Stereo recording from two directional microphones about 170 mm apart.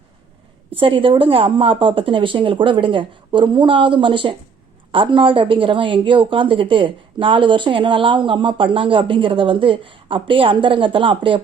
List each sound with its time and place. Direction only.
0.7 s a woman's voice: 35° right (ahead or behind)